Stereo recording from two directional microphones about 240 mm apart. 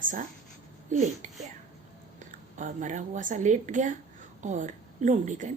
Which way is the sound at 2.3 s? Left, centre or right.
Right.